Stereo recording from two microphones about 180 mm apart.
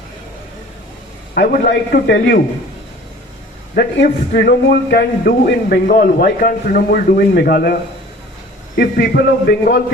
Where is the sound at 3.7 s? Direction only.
60° left (ahead or behind).